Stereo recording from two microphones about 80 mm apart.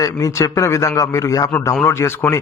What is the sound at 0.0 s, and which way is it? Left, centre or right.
A man's voice, left.